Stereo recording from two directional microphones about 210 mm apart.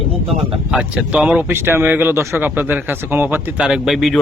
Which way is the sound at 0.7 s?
5° right (ahead or behind).